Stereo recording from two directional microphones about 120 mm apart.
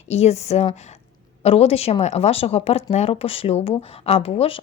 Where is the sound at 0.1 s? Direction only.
65° left (ahead or behind).